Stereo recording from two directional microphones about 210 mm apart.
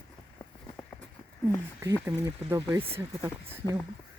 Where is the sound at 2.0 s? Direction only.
10° right (ahead or behind).